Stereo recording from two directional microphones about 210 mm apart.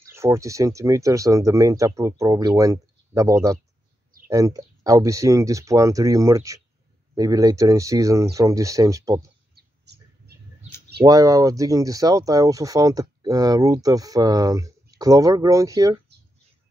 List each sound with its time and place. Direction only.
0.1 s speech: 15° right (ahead or behind)
9.6 s a sound: 50° right (ahead or behind)
11.0 s speech: 15° right (ahead or behind)